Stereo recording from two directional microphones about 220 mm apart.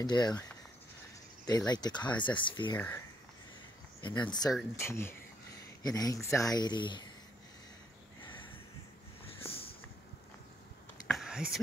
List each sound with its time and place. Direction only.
0.0 s speech: 20° left (ahead or behind)
1.4 s speech: 15° left (ahead or behind)
4.0 s speech: 20° left (ahead or behind)
9.5 s a sound: 25° left (ahead or behind)
11.1 s whispering: centre (ahead or behind)